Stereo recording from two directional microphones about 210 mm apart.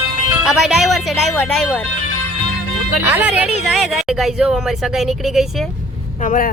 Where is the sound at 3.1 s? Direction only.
10° right (ahead or behind).